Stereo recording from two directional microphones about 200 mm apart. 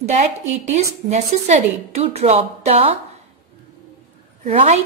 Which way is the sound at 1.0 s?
35° right (ahead or behind).